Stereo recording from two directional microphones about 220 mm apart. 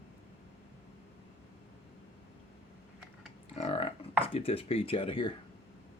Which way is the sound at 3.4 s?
25° left (ahead or behind).